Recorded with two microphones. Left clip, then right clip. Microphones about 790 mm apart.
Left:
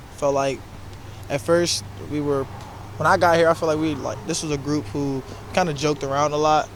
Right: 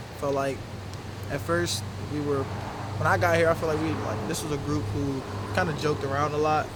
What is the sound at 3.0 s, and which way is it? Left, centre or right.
Speech, left.